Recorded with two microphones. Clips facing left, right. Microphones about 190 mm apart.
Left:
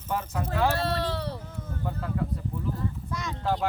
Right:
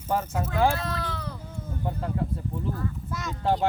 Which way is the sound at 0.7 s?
35° left (ahead or behind).